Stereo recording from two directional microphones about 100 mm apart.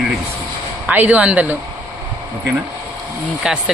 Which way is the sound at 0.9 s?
15° right (ahead or behind).